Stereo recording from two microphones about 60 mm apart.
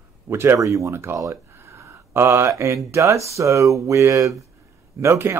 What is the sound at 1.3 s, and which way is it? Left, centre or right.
Speech, right.